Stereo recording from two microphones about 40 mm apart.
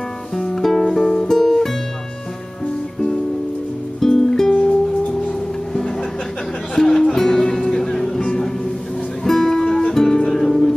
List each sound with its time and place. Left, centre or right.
0.4 s music: centre
4.0 s music: centre
6.7 s music: centre
9.2 s music: centre